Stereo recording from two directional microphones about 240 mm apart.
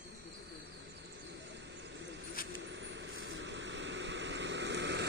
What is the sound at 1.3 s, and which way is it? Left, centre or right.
Vehicle, right.